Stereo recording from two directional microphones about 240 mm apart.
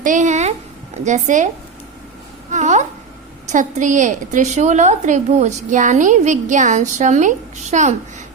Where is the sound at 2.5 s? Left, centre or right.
Right.